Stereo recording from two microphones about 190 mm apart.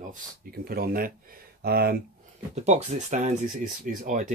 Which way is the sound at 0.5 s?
50° right (ahead or behind).